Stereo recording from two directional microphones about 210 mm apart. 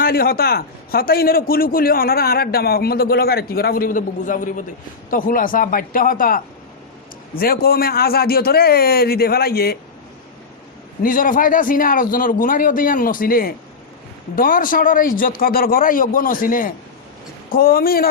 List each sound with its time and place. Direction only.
0.0 s a man's voice: 45° left (ahead or behind)
11.0 s a man's voice: 40° left (ahead or behind)